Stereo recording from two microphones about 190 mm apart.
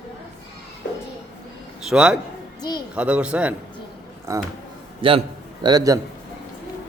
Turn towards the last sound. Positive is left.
turn(degrees=-20)  # may be behind; listen again after turning